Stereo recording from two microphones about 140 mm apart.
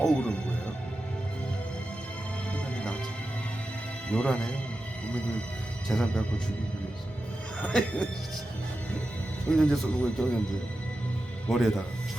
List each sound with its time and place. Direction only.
0.0 s speech: 5° left (ahead or behind)
2.5 s music: 10° left (ahead or behind)
4.1 s a man's voice: 5° left (ahead or behind)
5.9 s speech: 5° left (ahead or behind)
7.6 s a man's voice: 5° left (ahead or behind)
9.6 s speech: 5° left (ahead or behind)
11.4 s speech: 5° left (ahead or behind)